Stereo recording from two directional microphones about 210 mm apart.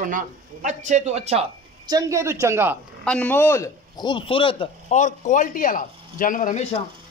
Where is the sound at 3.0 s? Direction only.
5° left (ahead or behind); by 6.8 s 35° left (ahead or behind).